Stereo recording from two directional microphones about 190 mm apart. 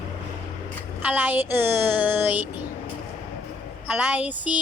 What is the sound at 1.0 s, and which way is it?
Speech, 10° right (ahead or behind).